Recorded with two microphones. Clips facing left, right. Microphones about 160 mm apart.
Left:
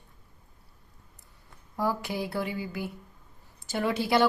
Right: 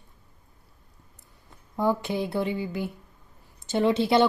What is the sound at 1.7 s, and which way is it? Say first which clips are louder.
Speech: right 4 dB; 20° right (ahead or behind).